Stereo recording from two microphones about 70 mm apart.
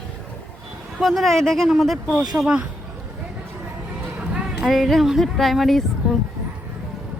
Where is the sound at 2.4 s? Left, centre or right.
Right.